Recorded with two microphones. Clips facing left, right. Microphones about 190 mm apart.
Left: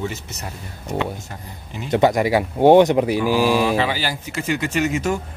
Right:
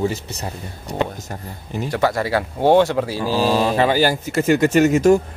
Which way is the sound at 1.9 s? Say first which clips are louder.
Left 4 dB; 20° left (ahead or behind).